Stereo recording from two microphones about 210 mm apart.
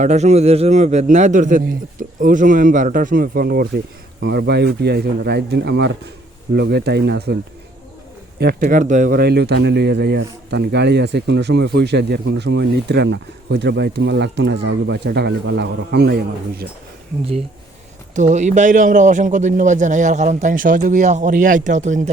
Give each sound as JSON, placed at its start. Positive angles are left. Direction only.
{"t": 0.0, "sound": "a man's voice", "side_deg": -35}
{"t": 8.4, "sound": "speech", "side_deg": -50}
{"t": 8.6, "sound": "speech", "side_deg": -35}
{"t": 18.1, "sound": "a man's voice", "side_deg": -35}